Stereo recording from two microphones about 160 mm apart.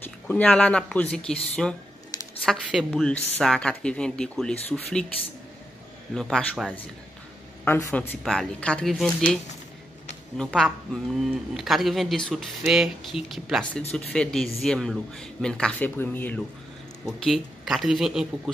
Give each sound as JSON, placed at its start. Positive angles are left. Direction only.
{"t": 0.0, "sound": "speech", "side_deg": 10}
{"t": 6.1, "sound": "speech", "side_deg": 5}
{"t": 7.6, "sound": "speech", "side_deg": 15}
{"t": 8.2, "sound": "speech", "side_deg": 5}
{"t": 10.3, "sound": "speech", "side_deg": 5}